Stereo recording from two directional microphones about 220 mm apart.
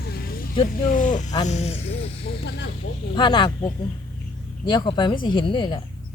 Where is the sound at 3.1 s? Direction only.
20° left (ahead or behind).